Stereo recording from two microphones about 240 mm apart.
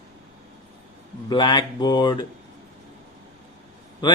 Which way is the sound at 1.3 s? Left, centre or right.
Centre.